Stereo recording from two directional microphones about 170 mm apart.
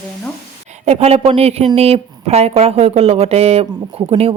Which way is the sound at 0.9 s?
40° right (ahead or behind).